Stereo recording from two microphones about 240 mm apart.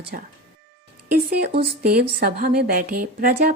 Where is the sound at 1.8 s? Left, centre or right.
Right.